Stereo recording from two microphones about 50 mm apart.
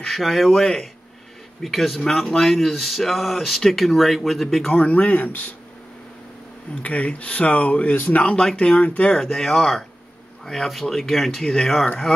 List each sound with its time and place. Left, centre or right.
0.1 s speech: centre
4.7 s speech: left
6.8 s speech: left
9.1 s speech: centre